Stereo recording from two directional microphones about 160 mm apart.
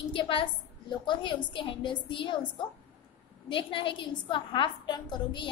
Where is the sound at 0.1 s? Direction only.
30° left (ahead or behind).